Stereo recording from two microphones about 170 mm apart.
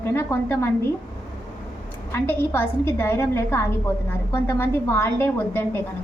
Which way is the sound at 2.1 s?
15° left (ahead or behind).